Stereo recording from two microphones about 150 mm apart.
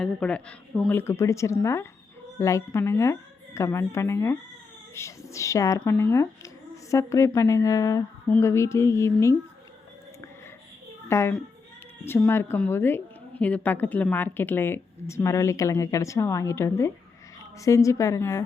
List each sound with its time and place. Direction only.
0.0 s a woman's voice: 10° left (ahead or behind)
11.1 s a woman's voice: 15° left (ahead or behind)